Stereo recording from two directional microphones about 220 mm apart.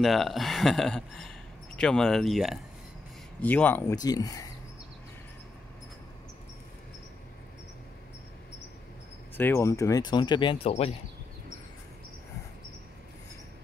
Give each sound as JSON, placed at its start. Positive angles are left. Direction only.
{"t": 0.0, "sound": "speech", "side_deg": 0}
{"t": 9.4, "sound": "speech", "side_deg": 10}